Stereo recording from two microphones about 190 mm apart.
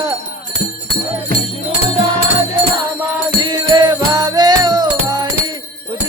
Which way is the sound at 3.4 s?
20° right (ahead or behind).